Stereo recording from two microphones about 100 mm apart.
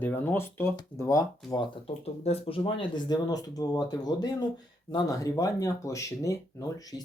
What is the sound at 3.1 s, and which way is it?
Speech, 40° left (ahead or behind).